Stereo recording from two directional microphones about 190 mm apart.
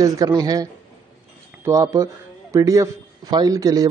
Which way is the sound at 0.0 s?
20° right (ahead or behind).